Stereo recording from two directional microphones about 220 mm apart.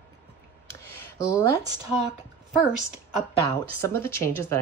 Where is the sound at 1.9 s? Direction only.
30° left (ahead or behind).